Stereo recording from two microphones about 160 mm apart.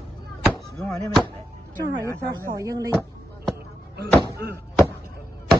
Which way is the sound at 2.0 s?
15° left (ahead or behind).